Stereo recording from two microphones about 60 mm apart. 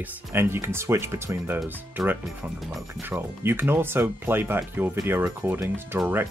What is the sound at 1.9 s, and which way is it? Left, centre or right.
Speech, right.